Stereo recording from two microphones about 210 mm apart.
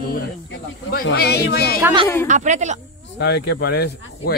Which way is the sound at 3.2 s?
55° left (ahead or behind).